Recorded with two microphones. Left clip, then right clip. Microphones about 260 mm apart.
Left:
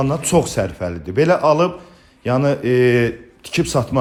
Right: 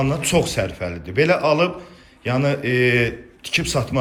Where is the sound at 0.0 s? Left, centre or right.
Centre.